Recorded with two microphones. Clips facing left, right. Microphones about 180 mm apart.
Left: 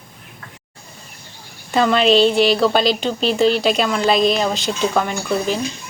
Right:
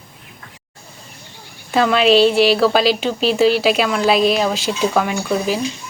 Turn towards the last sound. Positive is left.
turn(degrees=-5)  # may be behind; listen again after turning